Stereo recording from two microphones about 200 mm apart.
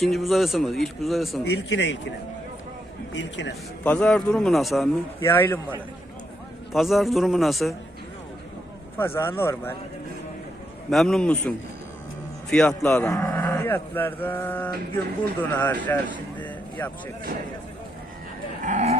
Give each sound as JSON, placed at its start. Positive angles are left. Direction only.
{"t": 0.0, "sound": "a man's voice", "side_deg": 0}
{"t": 1.5, "sound": "speech", "side_deg": 65}
{"t": 3.1, "sound": "speech", "side_deg": 65}
{"t": 3.8, "sound": "a man's voice", "side_deg": 5}
{"t": 5.2, "sound": "cattle", "side_deg": 10}
{"t": 6.7, "sound": "a man's voice", "side_deg": 0}
{"t": 9.0, "sound": "cattle", "side_deg": 10}
{"t": 10.9, "sound": "a man's voice", "side_deg": 0}
{"t": 13.1, "sound": "cattle", "side_deg": 10}
{"t": 16.4, "sound": "speech", "side_deg": 10}
{"t": 18.6, "sound": "livestock", "side_deg": -35}